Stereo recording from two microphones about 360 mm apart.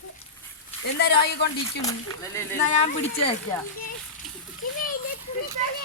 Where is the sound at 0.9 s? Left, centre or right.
Left.